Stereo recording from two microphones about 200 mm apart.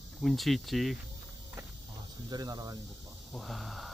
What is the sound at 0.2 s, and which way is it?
Speech, centre (ahead or behind).